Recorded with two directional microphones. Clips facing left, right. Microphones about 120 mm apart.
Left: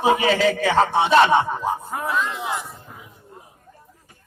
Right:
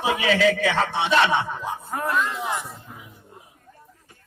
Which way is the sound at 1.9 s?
5° left (ahead or behind).